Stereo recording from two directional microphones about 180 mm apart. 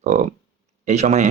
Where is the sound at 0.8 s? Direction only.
40° right (ahead or behind).